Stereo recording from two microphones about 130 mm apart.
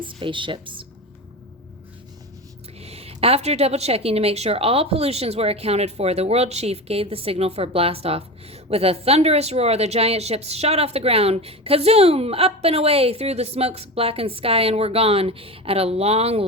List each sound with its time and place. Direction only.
0.0 s speech: 40° right (ahead or behind)
2.8 s a woman's voice: 50° right (ahead or behind)